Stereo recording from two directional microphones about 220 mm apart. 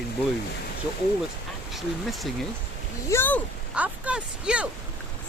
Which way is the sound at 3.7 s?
5° right (ahead or behind).